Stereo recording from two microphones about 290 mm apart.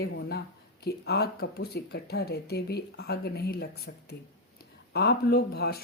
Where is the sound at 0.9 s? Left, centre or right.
Left.